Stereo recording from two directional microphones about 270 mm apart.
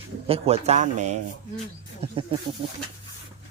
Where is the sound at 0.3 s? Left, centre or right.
Right.